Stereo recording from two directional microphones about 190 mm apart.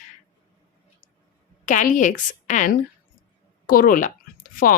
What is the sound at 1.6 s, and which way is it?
A woman's voice, 40° left (ahead or behind).